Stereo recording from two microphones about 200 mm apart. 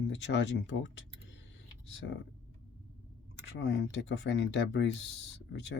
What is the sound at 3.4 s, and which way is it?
Speech, 60° left (ahead or behind).